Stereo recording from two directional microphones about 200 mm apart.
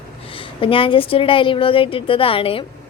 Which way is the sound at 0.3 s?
25° left (ahead or behind).